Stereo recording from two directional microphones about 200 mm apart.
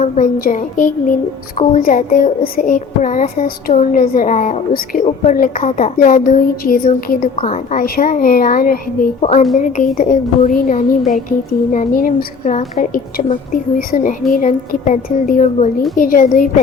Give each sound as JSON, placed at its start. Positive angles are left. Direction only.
{"t": 0.0, "sound": "a child's voice", "side_deg": 45}
{"t": 7.3, "sound": "a child's voice", "side_deg": 35}
{"t": 9.2, "sound": "a child's voice", "side_deg": 35}